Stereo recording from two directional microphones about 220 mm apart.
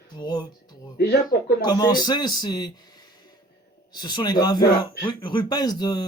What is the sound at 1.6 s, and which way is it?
A man's voice, 20° left (ahead or behind).